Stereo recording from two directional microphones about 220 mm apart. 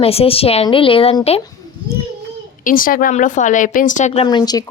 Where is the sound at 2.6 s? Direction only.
40° left (ahead or behind).